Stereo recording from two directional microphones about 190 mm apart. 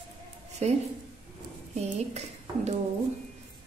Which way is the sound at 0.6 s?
35° right (ahead or behind).